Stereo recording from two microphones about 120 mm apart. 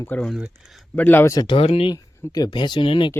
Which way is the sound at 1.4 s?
50° left (ahead or behind).